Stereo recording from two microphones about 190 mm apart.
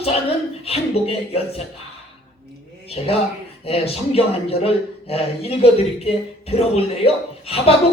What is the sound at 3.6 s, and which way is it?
Speech, 30° left (ahead or behind).